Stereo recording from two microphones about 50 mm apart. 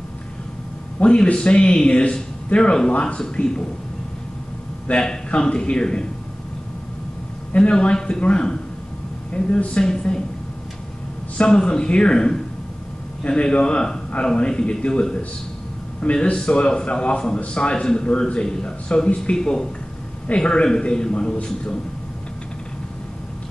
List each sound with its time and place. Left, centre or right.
1.0 s a man's voice: left
5.0 s a man's voice: centre
7.5 s a man's voice: left
11.4 s a man's voice: centre